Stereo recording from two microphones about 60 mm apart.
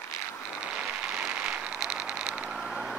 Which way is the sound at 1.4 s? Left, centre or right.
Right.